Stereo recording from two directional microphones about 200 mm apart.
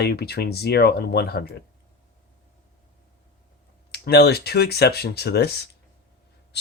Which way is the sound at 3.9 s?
55° left (ahead or behind).